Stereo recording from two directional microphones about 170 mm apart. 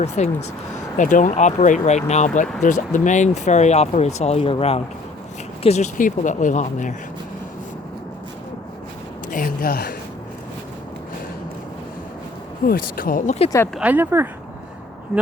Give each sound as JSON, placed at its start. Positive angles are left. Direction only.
{"t": 0.0, "sound": "speech", "side_deg": 40}
{"t": 9.3, "sound": "a woman's voice", "side_deg": 55}
{"t": 12.6, "sound": "speech", "side_deg": 60}
{"t": 13.7, "sound": "speech", "side_deg": -10}